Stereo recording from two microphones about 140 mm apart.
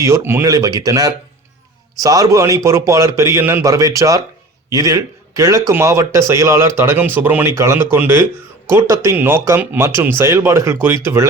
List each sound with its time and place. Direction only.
0.0 s speech: 20° right (ahead or behind)